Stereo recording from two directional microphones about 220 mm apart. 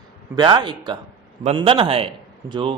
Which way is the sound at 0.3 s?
20° right (ahead or behind).